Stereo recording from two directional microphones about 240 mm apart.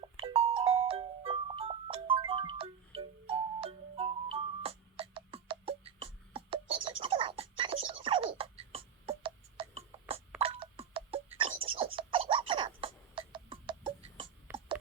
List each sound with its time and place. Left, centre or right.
0.2 s music: right
10.4 s tick-tock: right
11.3 s a sound: right